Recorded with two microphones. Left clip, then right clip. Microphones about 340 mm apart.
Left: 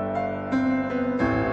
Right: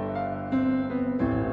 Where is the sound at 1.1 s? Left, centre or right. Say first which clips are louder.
Left 5 dB; left.